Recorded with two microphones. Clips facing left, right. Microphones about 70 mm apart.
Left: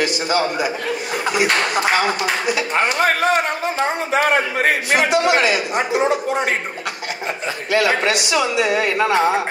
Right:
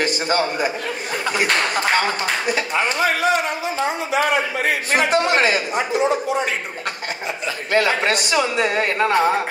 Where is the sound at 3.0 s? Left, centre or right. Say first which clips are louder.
Left 1 dB; left.